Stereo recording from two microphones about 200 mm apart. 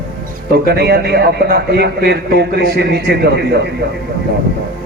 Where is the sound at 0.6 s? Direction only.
55° right (ahead or behind).